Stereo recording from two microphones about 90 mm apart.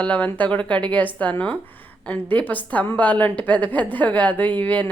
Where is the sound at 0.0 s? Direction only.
15° left (ahead or behind).